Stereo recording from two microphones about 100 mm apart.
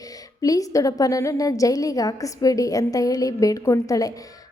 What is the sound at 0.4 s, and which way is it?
A woman's voice, 35° left (ahead or behind).